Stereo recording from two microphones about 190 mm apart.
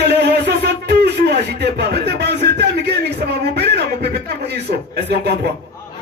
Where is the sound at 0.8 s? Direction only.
60° right (ahead or behind).